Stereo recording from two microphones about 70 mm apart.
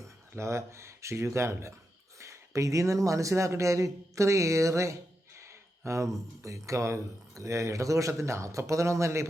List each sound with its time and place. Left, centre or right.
0.0 s speech: right